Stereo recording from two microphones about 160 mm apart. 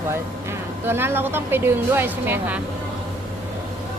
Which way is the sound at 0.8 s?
15° right (ahead or behind).